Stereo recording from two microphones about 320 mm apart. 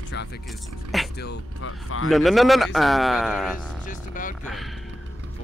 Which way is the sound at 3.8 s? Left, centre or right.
Left.